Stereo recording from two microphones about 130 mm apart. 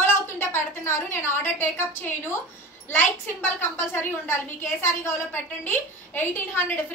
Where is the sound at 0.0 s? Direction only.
15° left (ahead or behind).